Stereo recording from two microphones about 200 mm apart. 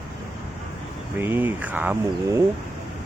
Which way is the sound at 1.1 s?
10° right (ahead or behind).